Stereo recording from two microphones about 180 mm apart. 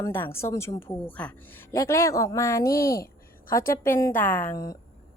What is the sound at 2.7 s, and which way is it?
Speech, 55° left (ahead or behind).